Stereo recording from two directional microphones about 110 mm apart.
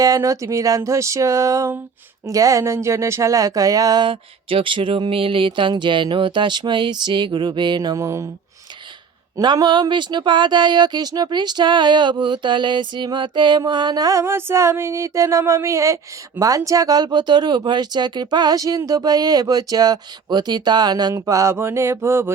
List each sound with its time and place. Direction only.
0.0 s speech: 30° right (ahead or behind)
0.8 s a sound: 25° right (ahead or behind)
2.2 s speech: 30° right (ahead or behind)
4.1 s speech: 55° right (ahead or behind); by 8.3 s 25° right (ahead or behind)
9.4 s speech: 40° right (ahead or behind); by 22.3 s 25° right (ahead or behind)